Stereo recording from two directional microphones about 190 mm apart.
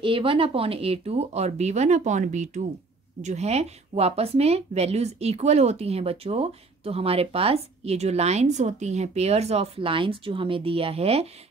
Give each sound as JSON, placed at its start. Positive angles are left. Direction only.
{"t": 0.0, "sound": "speech", "side_deg": -30}